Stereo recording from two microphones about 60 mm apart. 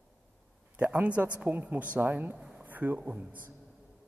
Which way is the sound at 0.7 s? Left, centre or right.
Right.